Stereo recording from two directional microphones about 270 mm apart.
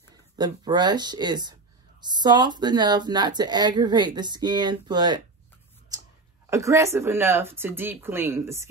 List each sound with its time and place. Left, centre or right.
0.1 s speech: centre
5.9 s a sound: centre
6.5 s speech: centre